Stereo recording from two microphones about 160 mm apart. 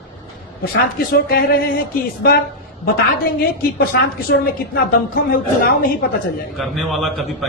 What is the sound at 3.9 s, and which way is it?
Speech, 90° left.